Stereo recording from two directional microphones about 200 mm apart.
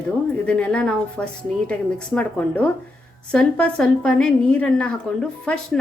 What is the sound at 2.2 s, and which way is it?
Dishes, 5° left (ahead or behind).